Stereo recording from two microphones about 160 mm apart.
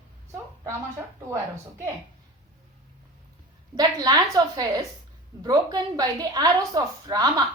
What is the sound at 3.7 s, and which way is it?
Speech, 25° right (ahead or behind).